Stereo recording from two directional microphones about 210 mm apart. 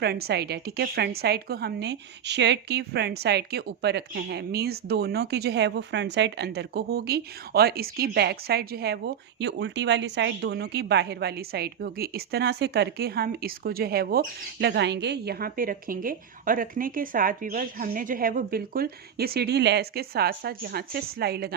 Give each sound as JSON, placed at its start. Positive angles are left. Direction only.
{"t": 0.0, "sound": "a woman's voice", "side_deg": -50}